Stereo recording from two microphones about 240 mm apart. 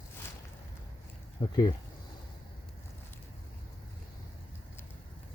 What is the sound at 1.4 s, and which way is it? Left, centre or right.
Speech, left.